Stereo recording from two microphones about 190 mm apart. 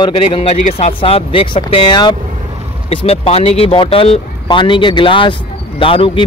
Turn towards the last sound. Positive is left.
turn(degrees=30)  # may be behind; listen again after turning